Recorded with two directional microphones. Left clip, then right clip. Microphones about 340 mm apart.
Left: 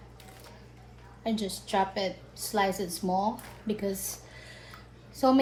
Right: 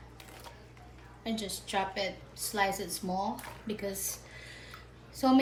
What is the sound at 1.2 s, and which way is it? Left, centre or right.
A woman's voice, centre.